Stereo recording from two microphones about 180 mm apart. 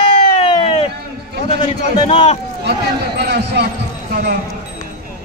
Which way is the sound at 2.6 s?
65° right (ahead or behind).